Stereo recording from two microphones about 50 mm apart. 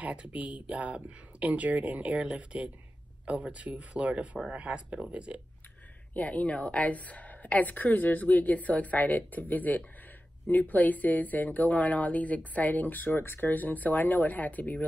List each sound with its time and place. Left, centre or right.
0.0 s speech: right
6.1 s speech: left